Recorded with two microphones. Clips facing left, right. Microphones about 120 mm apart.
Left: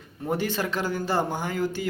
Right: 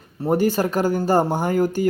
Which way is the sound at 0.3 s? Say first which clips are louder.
Right 8 dB; 45° right (ahead or behind).